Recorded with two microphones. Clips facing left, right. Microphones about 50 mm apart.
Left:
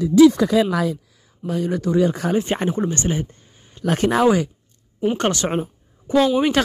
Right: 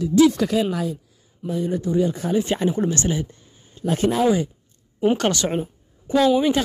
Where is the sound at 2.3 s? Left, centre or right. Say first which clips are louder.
Even; left.